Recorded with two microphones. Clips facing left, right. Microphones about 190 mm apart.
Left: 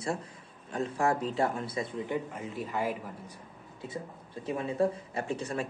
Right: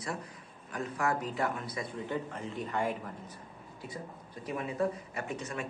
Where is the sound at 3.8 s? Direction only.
25° left (ahead or behind).